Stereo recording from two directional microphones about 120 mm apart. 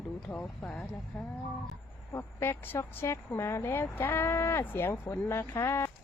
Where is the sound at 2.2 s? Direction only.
20° left (ahead or behind).